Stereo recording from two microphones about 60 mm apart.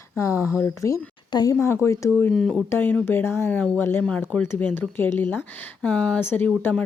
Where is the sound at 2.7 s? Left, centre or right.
Left.